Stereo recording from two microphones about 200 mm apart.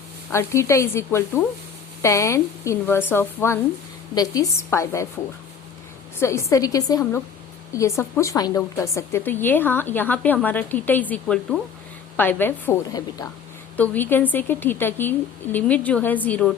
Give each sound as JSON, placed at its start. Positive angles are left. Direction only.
{"t": 0.3, "sound": "a woman's voice", "side_deg": 15}
{"t": 6.1, "sound": "a woman's voice", "side_deg": 15}